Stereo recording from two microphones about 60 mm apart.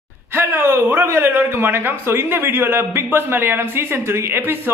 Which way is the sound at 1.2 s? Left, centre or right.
Right.